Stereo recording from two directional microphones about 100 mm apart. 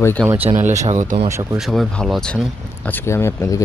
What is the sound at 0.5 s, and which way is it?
Speech, 90° right.